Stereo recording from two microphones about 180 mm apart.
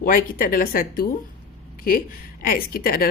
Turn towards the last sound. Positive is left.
turn(degrees=55)  # may be behind; listen again after turning